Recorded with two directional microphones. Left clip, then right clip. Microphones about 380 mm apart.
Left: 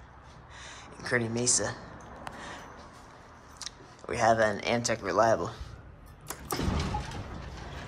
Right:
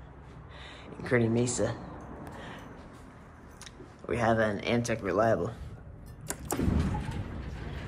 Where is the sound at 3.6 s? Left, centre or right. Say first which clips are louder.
Left 3 dB; centre.